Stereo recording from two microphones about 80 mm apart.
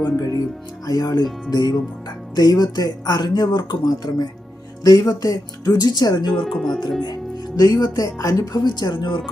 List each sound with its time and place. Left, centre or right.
0.0 s speech: left
6.4 s speech: centre
7.0 s speech: left
8.6 s speech: left